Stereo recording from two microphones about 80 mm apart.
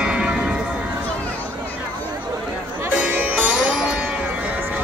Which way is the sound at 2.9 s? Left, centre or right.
Centre.